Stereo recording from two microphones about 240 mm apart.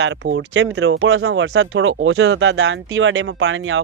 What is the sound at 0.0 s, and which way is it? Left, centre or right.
Speech, right.